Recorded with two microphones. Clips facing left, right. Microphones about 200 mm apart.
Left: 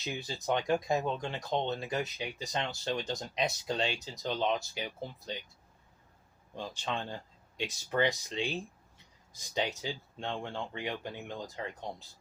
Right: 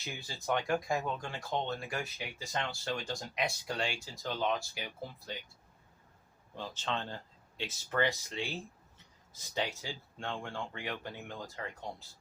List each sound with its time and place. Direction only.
0.0 s speech: 20° left (ahead or behind)
6.6 s speech: 15° left (ahead or behind)